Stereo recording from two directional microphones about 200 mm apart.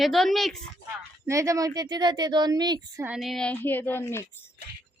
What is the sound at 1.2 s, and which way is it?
Speech, 15° right (ahead or behind).